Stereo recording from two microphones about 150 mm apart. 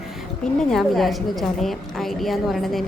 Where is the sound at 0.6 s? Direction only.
Centre (ahead or behind).